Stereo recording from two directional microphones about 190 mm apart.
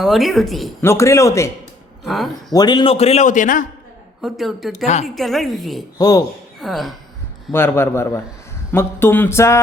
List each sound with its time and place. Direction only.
0.0 s a woman's voice: centre (ahead or behind)
0.8 s a sound: 15° left (ahead or behind)
2.0 s a woman's voice: centre (ahead or behind)
2.5 s a man's voice: 20° left (ahead or behind); by 3.7 s 45° left (ahead or behind)
4.2 s a woman's voice: centre (ahead or behind)
6.0 s a man's voice: 20° left (ahead or behind)
6.6 s a woman's voice: centre (ahead or behind)
7.5 s a sound: 10° left (ahead or behind)